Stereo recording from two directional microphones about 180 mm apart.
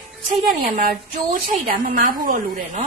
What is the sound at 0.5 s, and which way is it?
A woman's voice, 50° right (ahead or behind).